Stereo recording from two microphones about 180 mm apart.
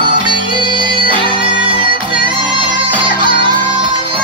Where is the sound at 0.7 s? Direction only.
25° right (ahead or behind).